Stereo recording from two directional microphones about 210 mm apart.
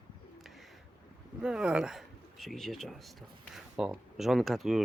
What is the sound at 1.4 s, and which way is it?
Speech, 5° right (ahead or behind).